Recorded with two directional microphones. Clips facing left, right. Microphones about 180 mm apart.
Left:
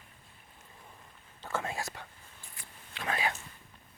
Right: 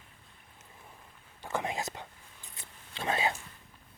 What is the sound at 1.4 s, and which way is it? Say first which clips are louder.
Whispering: right 2 dB; 15° right (ahead or behind).